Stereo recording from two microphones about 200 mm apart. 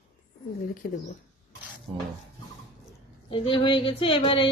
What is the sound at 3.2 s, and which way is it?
Speech, 25° left (ahead or behind).